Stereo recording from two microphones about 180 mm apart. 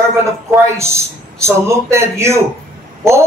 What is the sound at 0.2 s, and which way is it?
A man's voice, 15° right (ahead or behind).